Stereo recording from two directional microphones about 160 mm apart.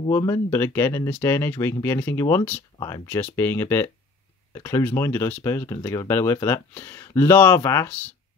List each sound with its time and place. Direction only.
0.1 s speech: 20° left (ahead or behind)